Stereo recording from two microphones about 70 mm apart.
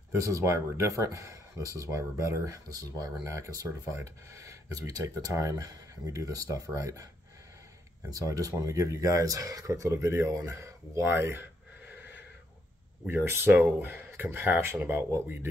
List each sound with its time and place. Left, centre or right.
0.2 s speech: right
8.1 s speech: right
13.0 s speech: right